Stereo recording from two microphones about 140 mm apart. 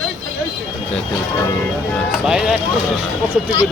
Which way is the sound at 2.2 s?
5° right (ahead or behind).